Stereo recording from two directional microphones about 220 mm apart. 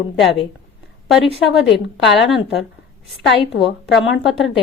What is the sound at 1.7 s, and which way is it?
Speech, 55° left (ahead or behind).